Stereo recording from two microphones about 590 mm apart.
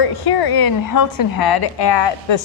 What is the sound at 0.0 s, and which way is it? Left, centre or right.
A woman's voice, left.